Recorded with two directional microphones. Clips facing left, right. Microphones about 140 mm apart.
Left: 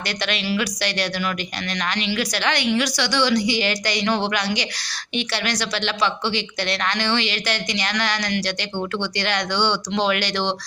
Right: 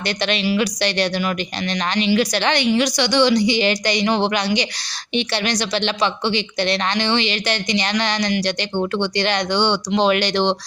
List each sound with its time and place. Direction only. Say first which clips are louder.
0.2 s a woman's voice: right 4 dB; 25° right (ahead or behind)